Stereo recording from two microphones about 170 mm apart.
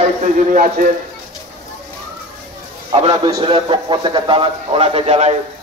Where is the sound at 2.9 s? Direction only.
25° right (ahead or behind).